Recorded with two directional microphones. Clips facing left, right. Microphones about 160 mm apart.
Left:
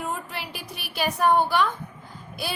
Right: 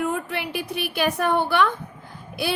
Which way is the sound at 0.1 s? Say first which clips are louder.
Right 6 dB; 65° right (ahead or behind).